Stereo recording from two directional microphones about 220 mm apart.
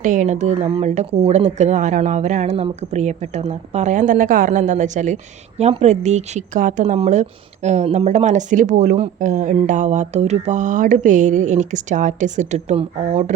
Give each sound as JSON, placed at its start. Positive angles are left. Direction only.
{"t": 0.0, "sound": "speech", "side_deg": -35}